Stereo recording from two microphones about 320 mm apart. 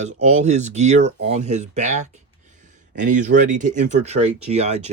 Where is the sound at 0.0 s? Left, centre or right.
Right.